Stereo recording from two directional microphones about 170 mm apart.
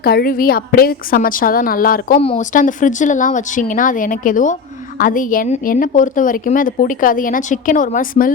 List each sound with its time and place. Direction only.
0.0 s a woman's voice: 65° left (ahead or behind)